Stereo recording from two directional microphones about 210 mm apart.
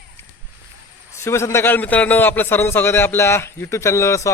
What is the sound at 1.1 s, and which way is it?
A man's voice, 10° left (ahead or behind).